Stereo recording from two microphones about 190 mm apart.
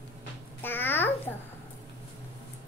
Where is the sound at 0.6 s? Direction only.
10° left (ahead or behind).